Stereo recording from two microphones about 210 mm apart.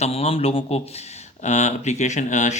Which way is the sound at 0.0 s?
30° left (ahead or behind).